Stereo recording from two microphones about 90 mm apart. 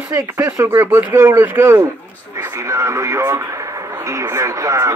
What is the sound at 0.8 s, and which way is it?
Speech, 25° right (ahead or behind).